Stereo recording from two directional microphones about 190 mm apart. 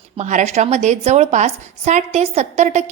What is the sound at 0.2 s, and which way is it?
A woman's voice, 40° right (ahead or behind).